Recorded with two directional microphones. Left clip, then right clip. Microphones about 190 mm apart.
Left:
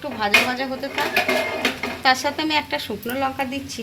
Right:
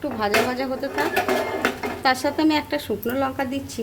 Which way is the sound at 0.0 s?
35° right (ahead or behind).